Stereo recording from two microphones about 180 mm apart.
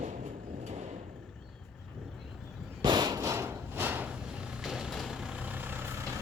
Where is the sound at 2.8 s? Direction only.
25° right (ahead or behind).